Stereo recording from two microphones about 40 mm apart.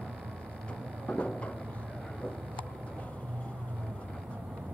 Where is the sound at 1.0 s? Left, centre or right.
Left.